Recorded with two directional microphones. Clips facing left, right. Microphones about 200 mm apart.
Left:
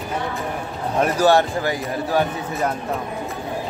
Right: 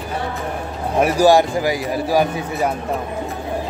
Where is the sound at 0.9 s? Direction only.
10° right (ahead or behind).